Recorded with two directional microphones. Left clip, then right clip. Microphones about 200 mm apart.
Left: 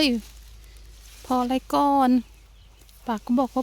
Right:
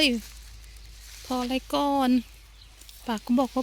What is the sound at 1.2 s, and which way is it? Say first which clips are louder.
Speech: left 5 dB; 30° left (ahead or behind).